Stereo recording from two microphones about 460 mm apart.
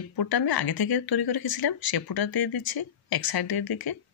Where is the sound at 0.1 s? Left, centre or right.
Left.